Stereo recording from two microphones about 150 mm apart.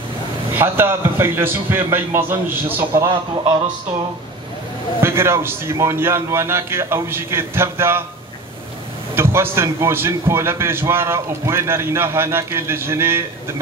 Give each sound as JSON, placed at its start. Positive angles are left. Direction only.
{"t": 0.5, "sound": "a man's voice", "side_deg": -15}
{"t": 3.1, "sound": "a man's voice", "side_deg": -30}
{"t": 5.0, "sound": "a man's voice", "side_deg": -15}
{"t": 9.1, "sound": "a man's voice", "side_deg": -15}